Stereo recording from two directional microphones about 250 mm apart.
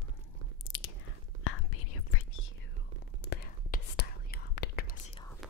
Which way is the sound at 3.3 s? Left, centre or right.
Left.